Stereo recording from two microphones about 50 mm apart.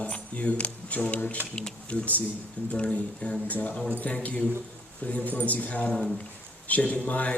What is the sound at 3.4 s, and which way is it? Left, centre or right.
Speech, left.